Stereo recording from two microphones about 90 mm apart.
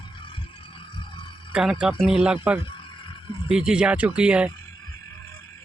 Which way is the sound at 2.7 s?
65° left (ahead or behind).